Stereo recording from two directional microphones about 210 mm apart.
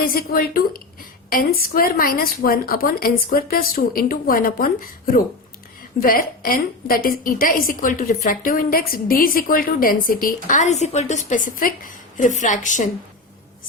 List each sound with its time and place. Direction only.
0.0 s a woman's voice: 45° left (ahead or behind)